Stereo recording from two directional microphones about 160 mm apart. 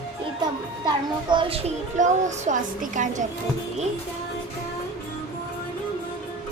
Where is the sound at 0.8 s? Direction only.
30° right (ahead or behind); by 3.2 s 55° right (ahead or behind).